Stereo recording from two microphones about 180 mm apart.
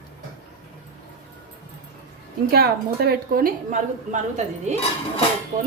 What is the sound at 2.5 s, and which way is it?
A woman's voice, 60° right (ahead or behind).